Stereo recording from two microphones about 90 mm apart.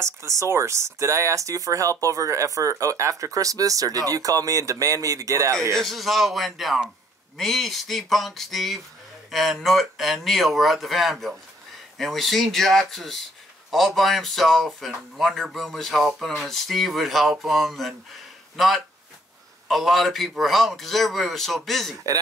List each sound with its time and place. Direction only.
0.0 s speech: 35° right (ahead or behind)
5.8 s speech: centre (ahead or behind)
19.7 s speech: centre (ahead or behind)